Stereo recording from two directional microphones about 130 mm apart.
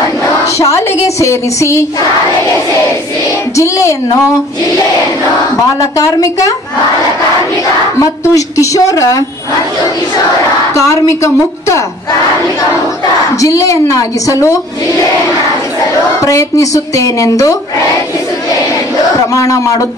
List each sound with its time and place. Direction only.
0.7 s speech: 25° left (ahead or behind)
3.5 s speech: 25° left (ahead or behind)
5.9 s speech: 25° left (ahead or behind)
8.0 s speech: 25° left (ahead or behind)
10.7 s speech: 20° left (ahead or behind)
13.4 s speech: 25° left (ahead or behind)
16.2 s speech: 25° left (ahead or behind)
19.3 s speech: 25° left (ahead or behind)